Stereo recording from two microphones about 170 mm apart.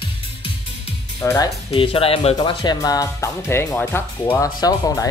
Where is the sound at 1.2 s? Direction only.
15° left (ahead or behind).